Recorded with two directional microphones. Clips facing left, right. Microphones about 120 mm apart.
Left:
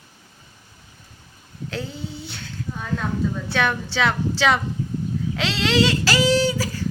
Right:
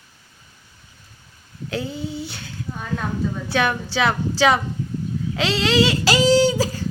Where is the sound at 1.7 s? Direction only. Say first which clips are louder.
Right 4 dB; 5° right (ahead or behind).